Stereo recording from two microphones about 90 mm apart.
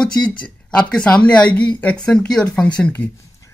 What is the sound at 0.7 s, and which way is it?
Speech, 10° left (ahead or behind).